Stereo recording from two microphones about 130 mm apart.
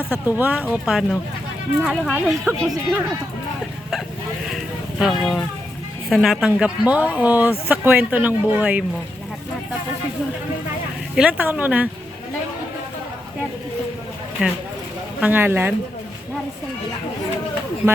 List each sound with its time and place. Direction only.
0.1 s speech: 15° right (ahead or behind)
4.5 s a sound: 5° right (ahead or behind)
5.2 s speech: 5° left (ahead or behind)
11.1 s speech: 10° right (ahead or behind)
14.4 s speech: 5° right (ahead or behind)
15.2 s speech: 15° right (ahead or behind)